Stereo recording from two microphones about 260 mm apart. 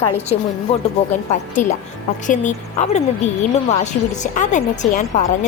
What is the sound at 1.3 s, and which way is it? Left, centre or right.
Speech, left.